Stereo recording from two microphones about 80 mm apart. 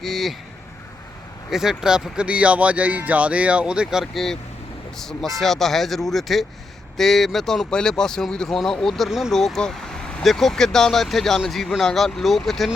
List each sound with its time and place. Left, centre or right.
0.0 s speech: centre
1.5 s speech: centre
4.0 s speech: centre